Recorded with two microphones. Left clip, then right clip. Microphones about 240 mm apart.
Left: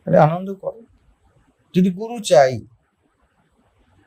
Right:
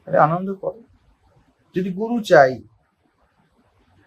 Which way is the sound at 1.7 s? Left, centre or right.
Left.